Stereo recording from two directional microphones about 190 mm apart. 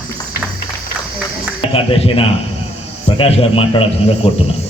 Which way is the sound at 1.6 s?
30° left (ahead or behind).